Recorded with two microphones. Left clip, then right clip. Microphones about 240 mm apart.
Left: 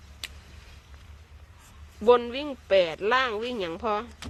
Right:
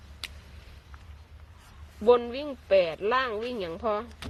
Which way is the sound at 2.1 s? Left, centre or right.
Centre.